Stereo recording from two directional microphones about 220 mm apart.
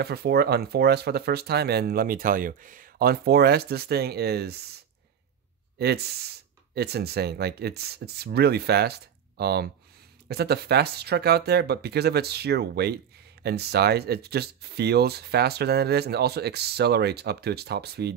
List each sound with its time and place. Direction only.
0.0 s speech: 45° right (ahead or behind)
5.8 s speech: 45° right (ahead or behind)